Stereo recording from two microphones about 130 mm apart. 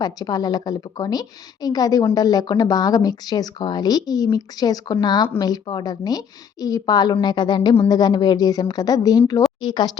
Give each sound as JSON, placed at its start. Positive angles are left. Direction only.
{"t": 0.0, "sound": "a woman's voice", "side_deg": 30}